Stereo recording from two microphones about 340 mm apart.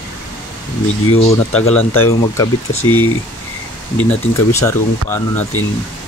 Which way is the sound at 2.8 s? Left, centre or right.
Left.